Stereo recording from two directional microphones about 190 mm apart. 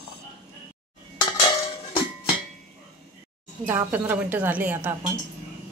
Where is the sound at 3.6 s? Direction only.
10° right (ahead or behind).